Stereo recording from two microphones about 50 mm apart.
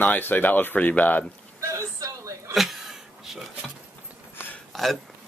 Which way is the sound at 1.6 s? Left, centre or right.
Right.